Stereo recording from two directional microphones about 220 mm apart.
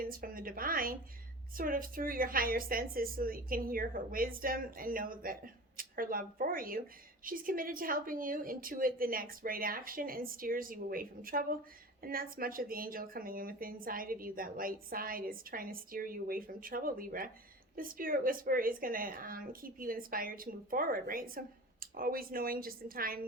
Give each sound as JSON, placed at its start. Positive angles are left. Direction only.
{"t": 0.0, "sound": "speech", "side_deg": -40}